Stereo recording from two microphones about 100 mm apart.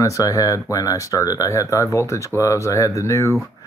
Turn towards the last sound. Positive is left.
turn(degrees=30)  # may be behind; listen again after turning